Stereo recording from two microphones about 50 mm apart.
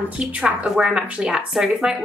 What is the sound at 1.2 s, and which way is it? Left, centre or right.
Speech, centre.